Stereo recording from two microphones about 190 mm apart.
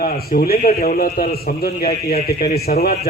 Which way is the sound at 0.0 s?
50° left (ahead or behind).